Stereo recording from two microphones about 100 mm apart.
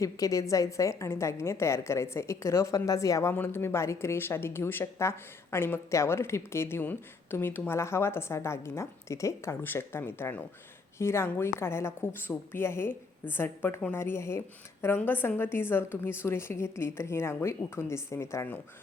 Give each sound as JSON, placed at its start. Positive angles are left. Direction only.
{"t": 0.0, "sound": "speech", "side_deg": 35}
{"t": 3.3, "sound": "speech", "side_deg": 20}